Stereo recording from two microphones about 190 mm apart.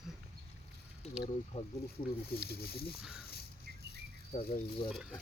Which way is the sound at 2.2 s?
55° left (ahead or behind).